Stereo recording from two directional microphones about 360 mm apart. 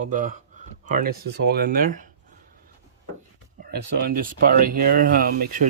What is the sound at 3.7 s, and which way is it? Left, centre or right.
Speech, right.